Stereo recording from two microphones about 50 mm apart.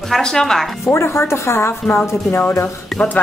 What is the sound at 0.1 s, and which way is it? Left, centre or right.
Speech, centre.